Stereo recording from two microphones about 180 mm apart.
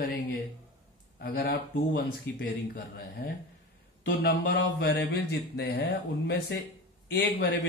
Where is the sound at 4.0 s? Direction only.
60° left (ahead or behind).